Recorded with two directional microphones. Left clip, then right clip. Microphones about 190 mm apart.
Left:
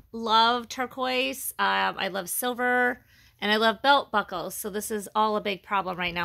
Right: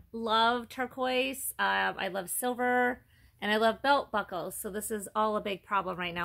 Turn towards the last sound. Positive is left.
turn(degrees=30)  # may be behind; listen again after turning